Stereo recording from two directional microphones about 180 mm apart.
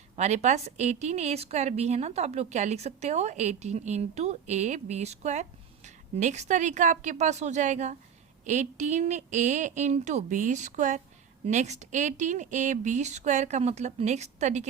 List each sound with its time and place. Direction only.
0.2 s a woman's voice: 40° right (ahead or behind)